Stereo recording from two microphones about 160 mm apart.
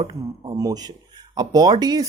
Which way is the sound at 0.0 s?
25° right (ahead or behind).